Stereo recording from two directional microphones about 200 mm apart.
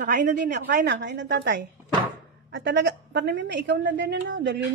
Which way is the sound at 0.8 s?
60° right (ahead or behind).